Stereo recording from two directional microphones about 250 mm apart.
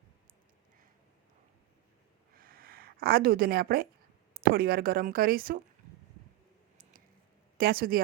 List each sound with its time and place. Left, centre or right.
2.3 s a sound: right
4.4 s speech: right
7.6 s speech: right